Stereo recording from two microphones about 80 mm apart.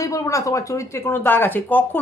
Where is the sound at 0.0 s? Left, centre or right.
Left.